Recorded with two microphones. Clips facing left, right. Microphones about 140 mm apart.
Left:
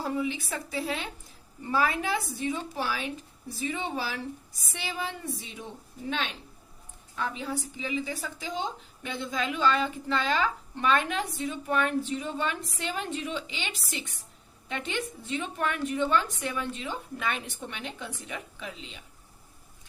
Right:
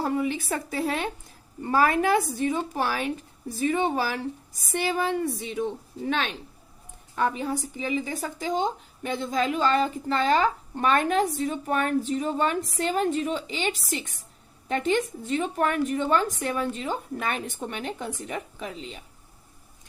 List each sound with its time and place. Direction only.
0.0 s a woman's voice: 55° right (ahead or behind)
7.2 s a woman's voice: 50° right (ahead or behind)